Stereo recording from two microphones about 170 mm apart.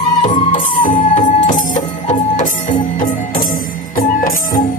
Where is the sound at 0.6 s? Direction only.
50° left (ahead or behind).